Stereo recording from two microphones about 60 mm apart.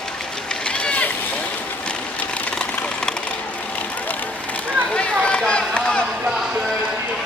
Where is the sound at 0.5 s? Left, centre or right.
Centre.